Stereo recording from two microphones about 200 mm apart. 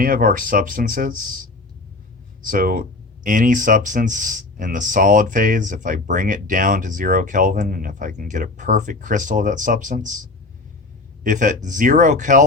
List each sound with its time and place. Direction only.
0.0 s speech: 45° right (ahead or behind)
2.5 s speech: 45° right (ahead or behind)
11.2 s speech: 40° right (ahead or behind)